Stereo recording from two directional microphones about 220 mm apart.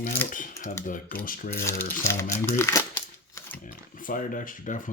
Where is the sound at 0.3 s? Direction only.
35° left (ahead or behind).